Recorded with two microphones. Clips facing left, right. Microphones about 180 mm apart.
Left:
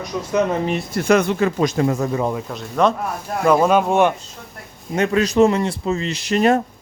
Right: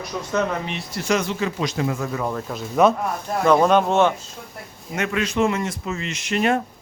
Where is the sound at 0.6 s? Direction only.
50° left (ahead or behind).